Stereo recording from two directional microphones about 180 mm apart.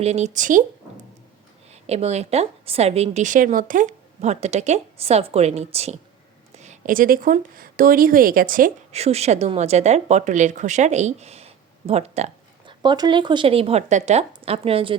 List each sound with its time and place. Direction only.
0.0 s speech: 40° right (ahead or behind)
1.7 s a woman's voice: 35° right (ahead or behind)
8.9 s a woman's voice: 35° right (ahead or behind)
12.8 s a woman's voice: 25° right (ahead or behind)